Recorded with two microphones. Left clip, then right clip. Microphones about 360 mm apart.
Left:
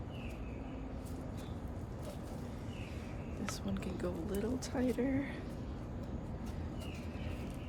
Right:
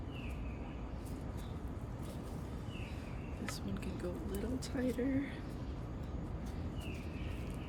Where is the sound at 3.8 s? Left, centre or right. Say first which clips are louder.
Left 3 dB; centre.